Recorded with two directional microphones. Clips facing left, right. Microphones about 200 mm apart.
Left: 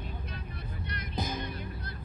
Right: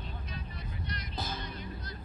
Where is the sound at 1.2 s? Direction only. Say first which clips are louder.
Left 6 dB; 15° left (ahead or behind).